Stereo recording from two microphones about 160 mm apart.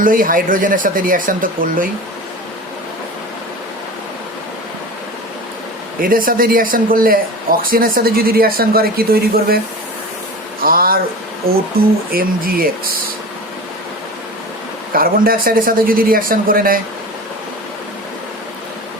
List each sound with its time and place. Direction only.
0.0 s speech: 60° right (ahead or behind)
6.0 s speech: 60° right (ahead or behind)
10.6 s a sound: 65° right (ahead or behind)
11.4 s speech: 70° right (ahead or behind)
14.9 s speech: 65° right (ahead or behind)